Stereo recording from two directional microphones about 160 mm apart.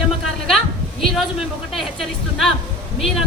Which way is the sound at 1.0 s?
Centre (ahead or behind).